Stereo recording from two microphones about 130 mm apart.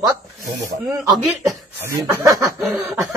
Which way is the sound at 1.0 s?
Centre (ahead or behind).